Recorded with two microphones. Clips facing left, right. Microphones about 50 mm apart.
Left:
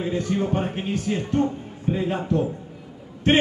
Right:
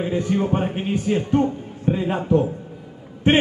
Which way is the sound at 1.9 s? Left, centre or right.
Right.